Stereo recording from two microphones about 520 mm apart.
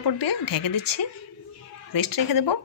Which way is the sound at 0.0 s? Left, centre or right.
Left.